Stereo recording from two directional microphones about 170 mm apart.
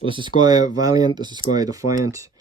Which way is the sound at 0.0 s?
30° right (ahead or behind).